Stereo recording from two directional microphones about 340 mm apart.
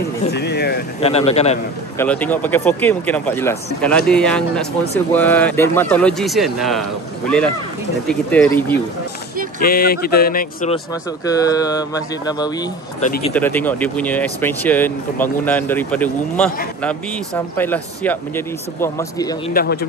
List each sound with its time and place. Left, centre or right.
0.2 s speech: left
1.0 s speech: centre
2.0 s speech: centre
9.6 s speech: left
11.2 s speech: centre
13.3 s speech: centre
19.5 s speech: left